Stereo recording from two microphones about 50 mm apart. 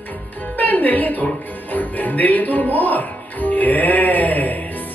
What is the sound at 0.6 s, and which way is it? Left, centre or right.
Speech, left.